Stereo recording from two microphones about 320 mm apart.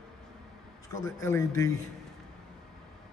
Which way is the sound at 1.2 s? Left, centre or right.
Centre.